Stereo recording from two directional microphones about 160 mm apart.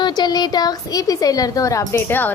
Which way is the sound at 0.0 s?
25° left (ahead or behind).